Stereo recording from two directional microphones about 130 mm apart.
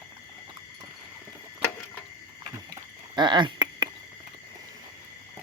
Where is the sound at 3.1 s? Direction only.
35° right (ahead or behind).